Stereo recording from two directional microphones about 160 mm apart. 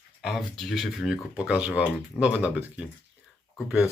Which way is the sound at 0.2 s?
5° right (ahead or behind).